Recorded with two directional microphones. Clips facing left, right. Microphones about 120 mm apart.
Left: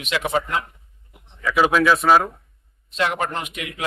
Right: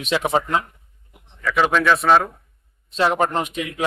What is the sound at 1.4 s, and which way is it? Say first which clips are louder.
Speech: left 1 dB; 5° left (ahead or behind).